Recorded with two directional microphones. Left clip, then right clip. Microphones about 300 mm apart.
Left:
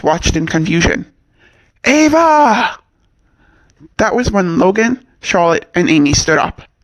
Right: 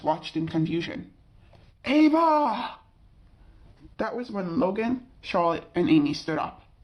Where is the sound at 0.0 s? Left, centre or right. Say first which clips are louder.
Left 13 dB; left.